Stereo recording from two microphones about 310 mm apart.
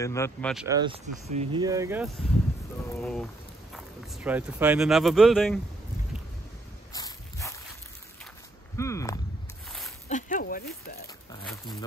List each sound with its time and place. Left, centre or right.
0.0 s speech: centre
0.7 s speech: centre
2.9 s speech: centre
6.9 s dog: centre
8.7 s a sound: centre
10.0 s a sound: left